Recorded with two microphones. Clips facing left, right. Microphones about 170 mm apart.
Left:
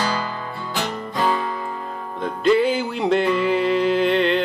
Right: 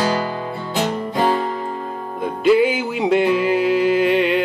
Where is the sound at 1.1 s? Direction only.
30° right (ahead or behind).